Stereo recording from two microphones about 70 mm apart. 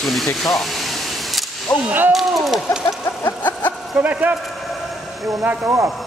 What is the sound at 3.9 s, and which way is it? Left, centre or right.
Speech, right.